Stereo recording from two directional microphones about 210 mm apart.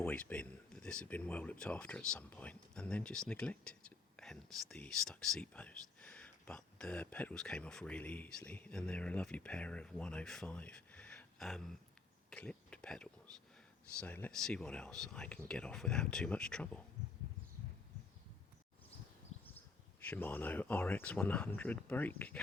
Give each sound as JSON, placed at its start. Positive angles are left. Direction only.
{"t": 0.0, "sound": "speech", "side_deg": 5}
{"t": 19.3, "sound": "a sound", "side_deg": 30}
{"t": 20.0, "sound": "speech", "side_deg": 10}